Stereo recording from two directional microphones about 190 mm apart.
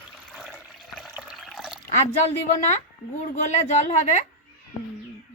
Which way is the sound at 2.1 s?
35° left (ahead or behind).